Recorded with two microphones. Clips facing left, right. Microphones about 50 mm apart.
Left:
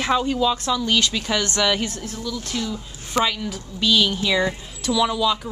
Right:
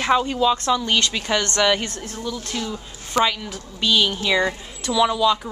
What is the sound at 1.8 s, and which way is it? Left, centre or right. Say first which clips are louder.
Speech: left 2 dB; centre.